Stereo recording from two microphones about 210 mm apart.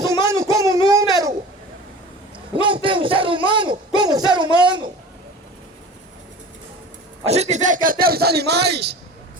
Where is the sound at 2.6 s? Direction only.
25° right (ahead or behind).